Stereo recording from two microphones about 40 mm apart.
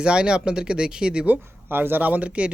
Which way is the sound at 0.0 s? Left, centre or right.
Right.